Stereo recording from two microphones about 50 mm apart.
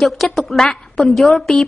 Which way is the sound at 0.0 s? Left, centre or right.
Centre.